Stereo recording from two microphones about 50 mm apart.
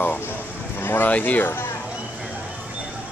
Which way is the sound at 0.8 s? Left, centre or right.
Left.